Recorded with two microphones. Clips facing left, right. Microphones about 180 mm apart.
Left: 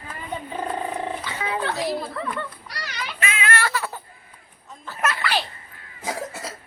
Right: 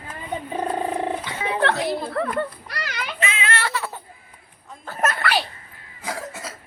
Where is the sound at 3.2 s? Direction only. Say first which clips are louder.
Left 1 dB; 25° right (ahead or behind).